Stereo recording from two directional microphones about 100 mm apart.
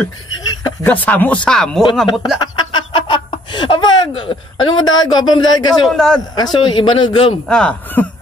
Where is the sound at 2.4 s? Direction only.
50° left (ahead or behind).